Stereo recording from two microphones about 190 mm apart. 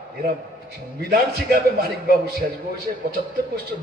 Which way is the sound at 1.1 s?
55° right (ahead or behind).